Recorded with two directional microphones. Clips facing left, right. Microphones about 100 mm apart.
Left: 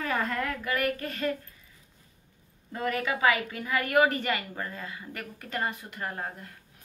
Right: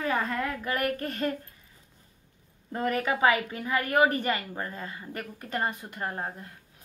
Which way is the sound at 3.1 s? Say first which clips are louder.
Right 2 dB; 30° right (ahead or behind).